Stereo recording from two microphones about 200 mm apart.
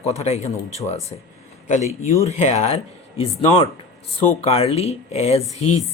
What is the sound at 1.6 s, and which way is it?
A man's voice, 35° left (ahead or behind).